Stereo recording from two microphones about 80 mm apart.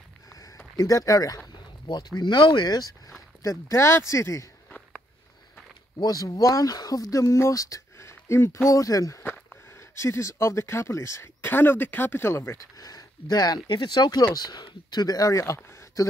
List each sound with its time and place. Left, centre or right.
0.3 s a sound: left
0.7 s speech: left
1.5 s speech: left
3.4 s speech: left
4.6 s sniff: centre
5.9 s speech: left
12.7 s speech: left
13.7 s speech: left